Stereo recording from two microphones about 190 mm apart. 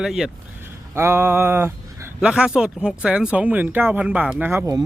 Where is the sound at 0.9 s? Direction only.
15° right (ahead or behind).